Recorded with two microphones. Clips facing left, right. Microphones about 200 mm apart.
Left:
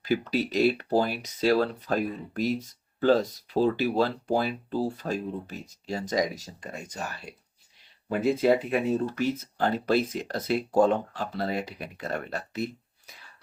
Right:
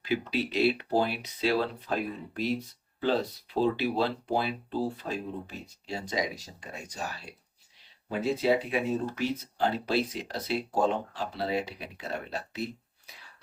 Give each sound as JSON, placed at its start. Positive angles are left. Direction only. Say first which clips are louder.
{"t": 0.0, "sound": "speech", "louder": "left 3 dB", "side_deg": 45}
{"t": 8.2, "sound": "speech", "louder": "left 3 dB", "side_deg": 50}